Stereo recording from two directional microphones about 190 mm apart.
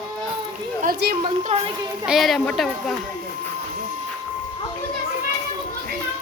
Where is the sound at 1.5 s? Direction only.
35° right (ahead or behind).